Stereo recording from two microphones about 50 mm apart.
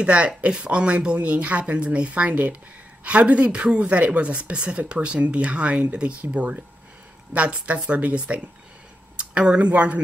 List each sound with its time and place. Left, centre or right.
0.0 s a woman's voice: right
9.2 s a sound: right
9.7 s a woman's voice: right